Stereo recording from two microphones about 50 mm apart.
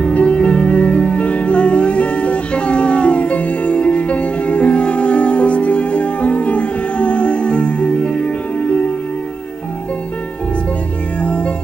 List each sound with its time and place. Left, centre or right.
0.0 s music: left
11.1 s music: left